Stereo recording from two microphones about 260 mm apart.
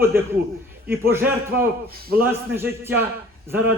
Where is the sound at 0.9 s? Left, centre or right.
Centre.